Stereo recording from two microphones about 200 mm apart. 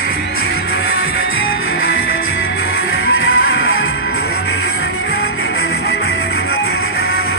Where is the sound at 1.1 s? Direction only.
80° left.